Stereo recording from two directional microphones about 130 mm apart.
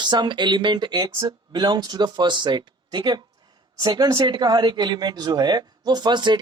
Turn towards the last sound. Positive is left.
turn(degrees=-35)  # may be behind; listen again after turning